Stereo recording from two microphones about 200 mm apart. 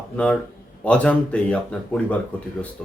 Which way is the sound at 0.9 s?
5° left (ahead or behind).